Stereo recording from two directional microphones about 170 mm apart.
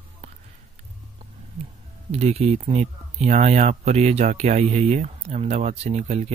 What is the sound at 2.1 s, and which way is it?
Speech, 35° right (ahead or behind).